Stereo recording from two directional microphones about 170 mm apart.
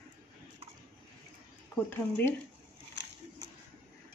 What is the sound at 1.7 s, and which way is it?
Speech, 10° left (ahead or behind).